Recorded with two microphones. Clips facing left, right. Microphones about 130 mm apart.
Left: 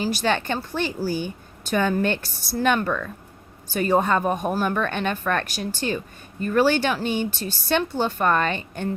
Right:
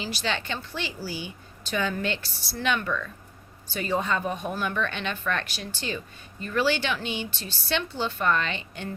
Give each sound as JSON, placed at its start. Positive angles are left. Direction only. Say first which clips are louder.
{"t": 0.0, "sound": "a woman's voice", "louder": "left 7 dB", "side_deg": 45}